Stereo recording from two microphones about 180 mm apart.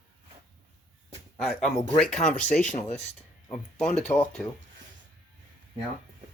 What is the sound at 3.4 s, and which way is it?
Speech, 40° left (ahead or behind).